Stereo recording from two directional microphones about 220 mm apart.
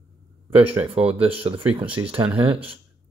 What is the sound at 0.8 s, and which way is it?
Speech, 25° right (ahead or behind).